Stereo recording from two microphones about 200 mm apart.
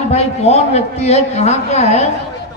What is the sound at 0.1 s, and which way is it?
A man's voice, 30° left (ahead or behind).